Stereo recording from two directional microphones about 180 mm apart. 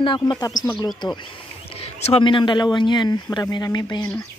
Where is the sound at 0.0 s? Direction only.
25° left (ahead or behind).